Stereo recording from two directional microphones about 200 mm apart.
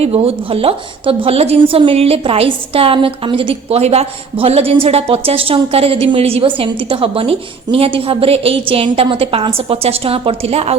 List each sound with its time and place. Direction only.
0.0 s a woman's voice: 30° right (ahead or behind)